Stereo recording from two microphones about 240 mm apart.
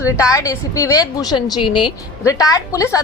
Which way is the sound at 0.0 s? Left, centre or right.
Centre.